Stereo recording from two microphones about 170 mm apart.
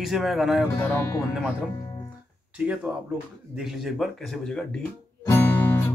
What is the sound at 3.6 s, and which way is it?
Speech, centre (ahead or behind).